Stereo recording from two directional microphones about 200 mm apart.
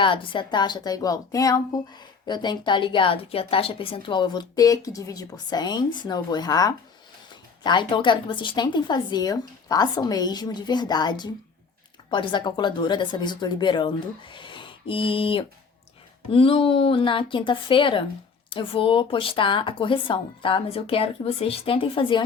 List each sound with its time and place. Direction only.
0.0 s a woman's voice: 25° left (ahead or behind)